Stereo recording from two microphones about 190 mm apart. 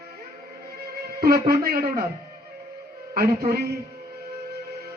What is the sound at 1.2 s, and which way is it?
Speech, 55° right (ahead or behind).